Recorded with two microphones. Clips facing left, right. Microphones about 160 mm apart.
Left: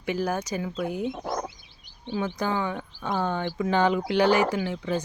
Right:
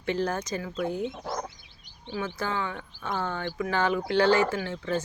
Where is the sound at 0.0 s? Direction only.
10° left (ahead or behind).